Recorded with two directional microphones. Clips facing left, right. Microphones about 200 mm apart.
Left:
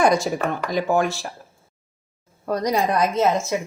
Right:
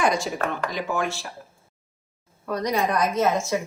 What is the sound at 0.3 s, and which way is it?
Speech, 45° left (ahead or behind).